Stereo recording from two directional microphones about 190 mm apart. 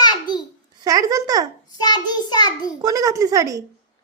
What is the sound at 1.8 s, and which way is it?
Speech, 20° left (ahead or behind).